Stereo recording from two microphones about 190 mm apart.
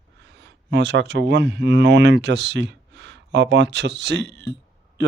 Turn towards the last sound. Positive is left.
turn(degrees=-65)  # may be behind; listen again after turning